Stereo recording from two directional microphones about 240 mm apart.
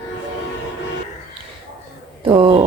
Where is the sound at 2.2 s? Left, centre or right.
Right.